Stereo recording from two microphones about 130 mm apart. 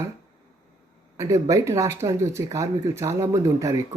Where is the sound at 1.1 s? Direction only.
25° right (ahead or behind).